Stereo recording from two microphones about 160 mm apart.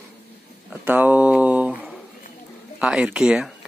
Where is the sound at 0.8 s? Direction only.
10° right (ahead or behind).